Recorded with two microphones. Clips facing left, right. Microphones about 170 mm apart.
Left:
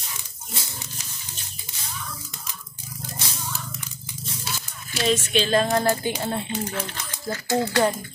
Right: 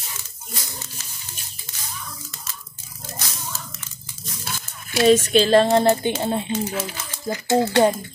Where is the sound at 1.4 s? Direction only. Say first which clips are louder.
Even; 10° right (ahead or behind).